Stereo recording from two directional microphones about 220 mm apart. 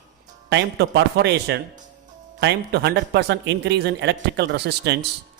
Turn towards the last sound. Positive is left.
turn(degrees=-50)  # may be behind; listen again after turning